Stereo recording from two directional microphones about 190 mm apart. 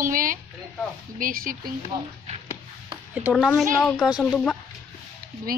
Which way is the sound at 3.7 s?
Centre (ahead or behind).